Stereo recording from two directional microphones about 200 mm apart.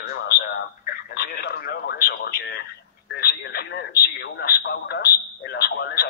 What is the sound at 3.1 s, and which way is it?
Radio, 50° left (ahead or behind).